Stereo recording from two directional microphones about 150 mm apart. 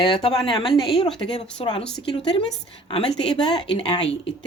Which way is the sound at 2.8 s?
35° left (ahead or behind).